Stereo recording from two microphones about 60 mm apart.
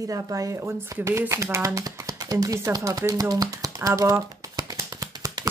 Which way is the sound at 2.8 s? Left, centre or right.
Right.